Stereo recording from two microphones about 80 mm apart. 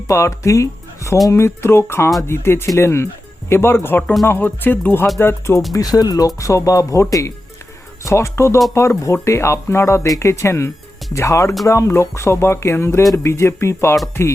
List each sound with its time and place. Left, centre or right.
0.1 s speech: left
5.7 s speech: left